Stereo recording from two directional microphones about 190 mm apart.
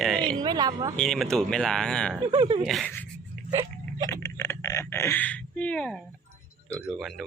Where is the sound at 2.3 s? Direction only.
25° right (ahead or behind).